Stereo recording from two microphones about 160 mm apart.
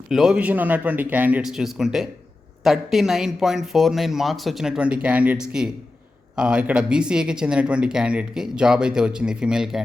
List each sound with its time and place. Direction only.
0.1 s speech: 5° right (ahead or behind)